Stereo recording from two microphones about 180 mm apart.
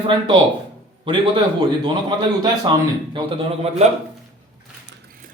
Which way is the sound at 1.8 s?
25° right (ahead or behind).